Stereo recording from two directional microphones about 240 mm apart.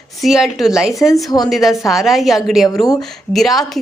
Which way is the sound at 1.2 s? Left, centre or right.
Centre.